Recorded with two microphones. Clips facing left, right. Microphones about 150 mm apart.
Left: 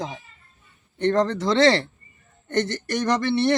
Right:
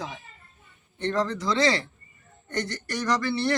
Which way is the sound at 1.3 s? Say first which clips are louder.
Left 5 dB; 55° left (ahead or behind).